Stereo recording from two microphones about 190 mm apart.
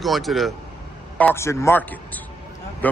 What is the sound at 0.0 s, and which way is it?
Speech, centre (ahead or behind).